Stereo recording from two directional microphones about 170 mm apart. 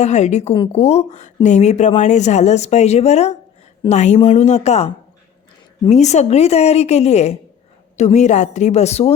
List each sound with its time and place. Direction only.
0.0 s speech: 40° left (ahead or behind)
5.9 s a woman's voice: 40° left (ahead or behind)